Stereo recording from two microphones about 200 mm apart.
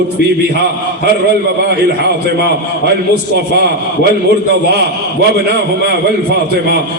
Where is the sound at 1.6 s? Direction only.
55° right (ahead or behind).